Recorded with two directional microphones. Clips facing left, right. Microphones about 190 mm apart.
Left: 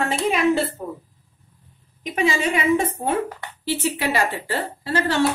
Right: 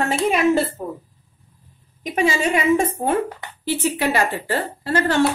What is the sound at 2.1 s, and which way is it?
A woman's voice, 45° right (ahead or behind).